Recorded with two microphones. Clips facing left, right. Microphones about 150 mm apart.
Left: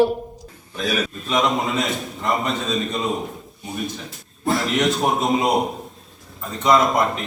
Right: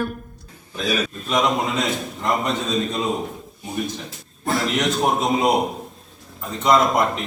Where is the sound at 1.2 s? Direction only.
Centre (ahead or behind).